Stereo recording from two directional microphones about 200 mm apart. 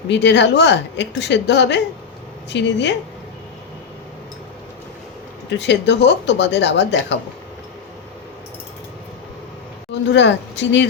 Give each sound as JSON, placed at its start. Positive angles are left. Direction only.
{"t": 0.1, "sound": "speech", "side_deg": 60}
{"t": 5.5, "sound": "speech", "side_deg": 60}
{"t": 10.1, "sound": "speech", "side_deg": 60}